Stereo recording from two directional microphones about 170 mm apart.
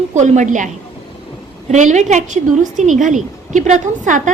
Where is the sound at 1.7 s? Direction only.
45° right (ahead or behind).